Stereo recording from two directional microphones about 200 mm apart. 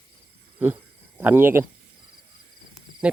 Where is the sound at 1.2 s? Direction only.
10° right (ahead or behind).